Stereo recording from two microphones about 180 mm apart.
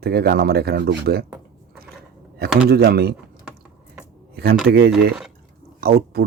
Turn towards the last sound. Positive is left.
turn(degrees=-60)  # may be behind; listen again after turning